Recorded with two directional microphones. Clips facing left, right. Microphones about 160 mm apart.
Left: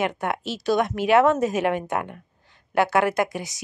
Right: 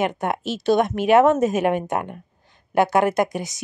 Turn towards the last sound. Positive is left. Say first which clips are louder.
# right 2 dB
turn(degrees=-20)  # may be behind; listen again after turning